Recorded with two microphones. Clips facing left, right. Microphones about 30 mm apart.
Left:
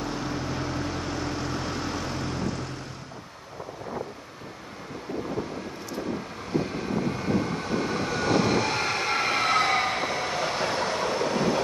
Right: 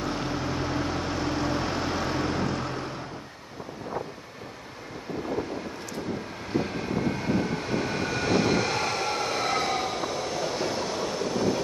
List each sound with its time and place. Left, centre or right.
0.0 s vehicle: centre
6.6 s vehicle: centre
9.1 s train: left
9.4 s train: left
11.1 s train: left